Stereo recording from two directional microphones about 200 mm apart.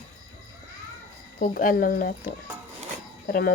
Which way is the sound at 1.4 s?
40° left (ahead or behind).